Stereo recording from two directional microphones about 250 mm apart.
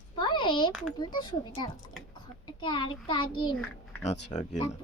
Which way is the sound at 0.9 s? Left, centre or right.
Centre.